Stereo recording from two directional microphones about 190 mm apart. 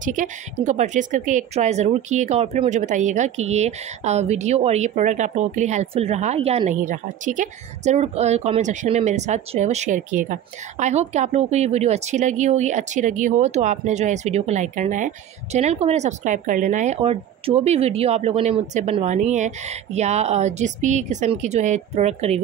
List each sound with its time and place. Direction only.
0.0 s a woman's voice: 40° right (ahead or behind)